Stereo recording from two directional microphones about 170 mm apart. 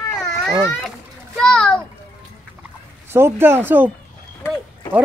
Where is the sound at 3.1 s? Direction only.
15° right (ahead or behind).